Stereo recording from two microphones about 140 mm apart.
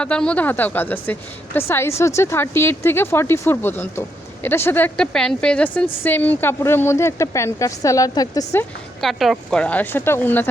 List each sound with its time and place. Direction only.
0.0 s a woman's voice: 5° left (ahead or behind)
5.1 s a woman's voice: 5° left (ahead or behind); by 8.4 s 25° left (ahead or behind)
9.0 s a woman's voice: centre (ahead or behind)